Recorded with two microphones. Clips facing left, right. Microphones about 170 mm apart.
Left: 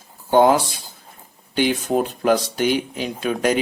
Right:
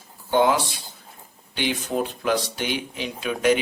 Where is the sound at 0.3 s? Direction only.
45° left (ahead or behind).